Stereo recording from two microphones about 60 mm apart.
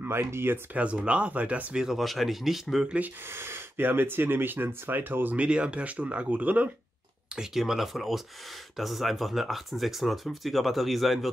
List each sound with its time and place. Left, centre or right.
0.0 s speech: right
0.7 s speech: centre
1.8 s speech: centre
3.3 s speech: right
5.4 s speech: centre
7.3 s speech: centre